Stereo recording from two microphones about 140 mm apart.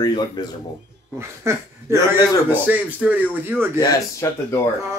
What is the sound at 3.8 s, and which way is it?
Speech, 20° left (ahead or behind).